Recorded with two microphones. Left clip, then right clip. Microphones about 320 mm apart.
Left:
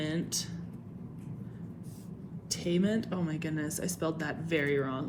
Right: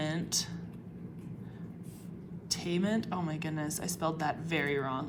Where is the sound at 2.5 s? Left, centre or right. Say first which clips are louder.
Left 2 dB; right.